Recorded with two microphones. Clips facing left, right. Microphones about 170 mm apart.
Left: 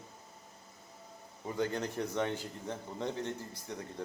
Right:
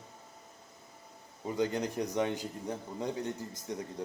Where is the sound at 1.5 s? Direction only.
15° right (ahead or behind).